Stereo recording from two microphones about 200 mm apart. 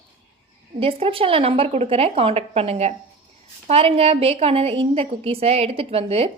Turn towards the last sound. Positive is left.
turn(degrees=-30)  # may be behind; listen again after turning